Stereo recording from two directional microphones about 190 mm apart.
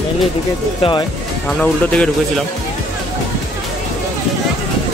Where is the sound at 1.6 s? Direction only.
5° left (ahead or behind).